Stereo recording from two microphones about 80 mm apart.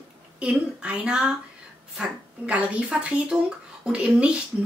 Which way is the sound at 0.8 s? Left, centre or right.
Centre.